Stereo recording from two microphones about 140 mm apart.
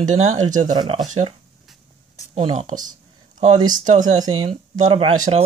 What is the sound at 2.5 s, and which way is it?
Speech, 65° right (ahead or behind).